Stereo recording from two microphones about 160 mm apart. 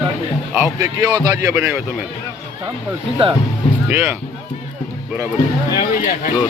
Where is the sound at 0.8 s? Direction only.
20° right (ahead or behind).